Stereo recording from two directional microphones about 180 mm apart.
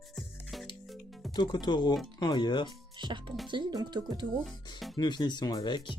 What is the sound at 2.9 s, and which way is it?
Speech, 25° right (ahead or behind).